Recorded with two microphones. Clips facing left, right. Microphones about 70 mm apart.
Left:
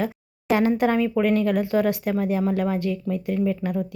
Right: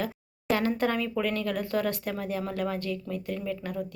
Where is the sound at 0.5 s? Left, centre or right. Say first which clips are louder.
Left 7 dB; centre.